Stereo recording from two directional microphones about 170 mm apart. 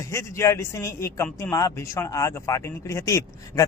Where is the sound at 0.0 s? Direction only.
15° left (ahead or behind).